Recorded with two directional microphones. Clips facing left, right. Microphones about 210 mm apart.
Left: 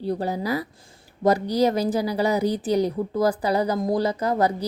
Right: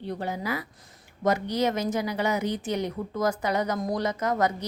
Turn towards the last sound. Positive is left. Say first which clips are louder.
# left 4 dB
turn(degrees=35)  # may be behind; listen again after turning